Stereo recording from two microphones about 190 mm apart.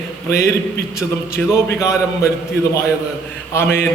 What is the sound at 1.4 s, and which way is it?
Speech, 5° left (ahead or behind).